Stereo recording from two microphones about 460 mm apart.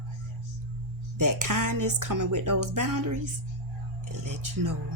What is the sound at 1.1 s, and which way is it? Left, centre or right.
A woman's voice, right.